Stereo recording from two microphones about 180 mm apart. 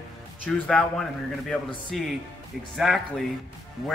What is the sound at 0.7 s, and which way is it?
Speech, 5° left (ahead or behind).